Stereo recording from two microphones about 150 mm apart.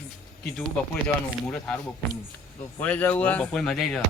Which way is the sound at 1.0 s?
5° left (ahead or behind).